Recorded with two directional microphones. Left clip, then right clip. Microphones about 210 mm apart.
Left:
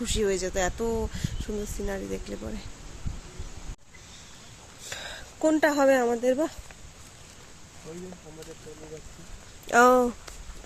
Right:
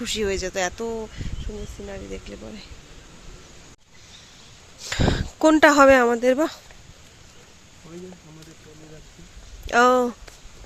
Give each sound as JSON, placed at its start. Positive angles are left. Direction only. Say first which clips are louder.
{"t": 0.0, "sound": "speech", "louder": "right 2 dB", "side_deg": -5}
{"t": 4.9, "sound": "speech", "louder": "right 13 dB", "side_deg": -15}
{"t": 9.6, "sound": "speech", "louder": "right 2 dB", "side_deg": 0}